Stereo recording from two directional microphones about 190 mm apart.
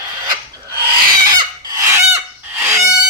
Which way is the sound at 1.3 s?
20° right (ahead or behind).